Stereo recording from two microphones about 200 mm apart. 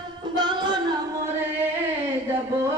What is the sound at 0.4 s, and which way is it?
Music, 20° right (ahead or behind).